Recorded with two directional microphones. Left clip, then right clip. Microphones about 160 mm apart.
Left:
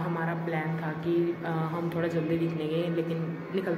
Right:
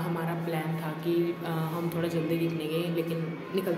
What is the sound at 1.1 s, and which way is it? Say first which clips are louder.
Speech: left 1 dB; 15° right (ahead or behind).